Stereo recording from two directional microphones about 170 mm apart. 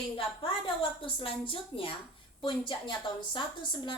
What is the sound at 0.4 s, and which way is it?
A woman's voice, 30° left (ahead or behind).